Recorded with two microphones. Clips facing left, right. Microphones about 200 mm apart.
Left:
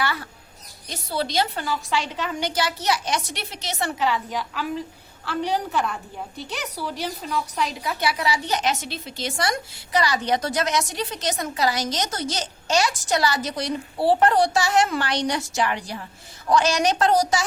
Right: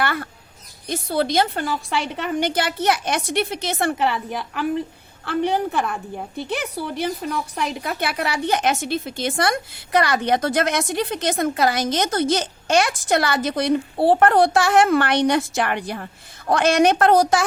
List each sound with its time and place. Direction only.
0.0 s a woman's voice: 55° right (ahead or behind)